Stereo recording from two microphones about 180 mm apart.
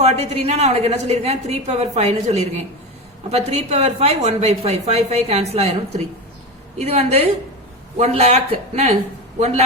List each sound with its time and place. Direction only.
0.0 s a woman's voice: 35° right (ahead or behind)
6.7 s a woman's voice: 35° right (ahead or behind)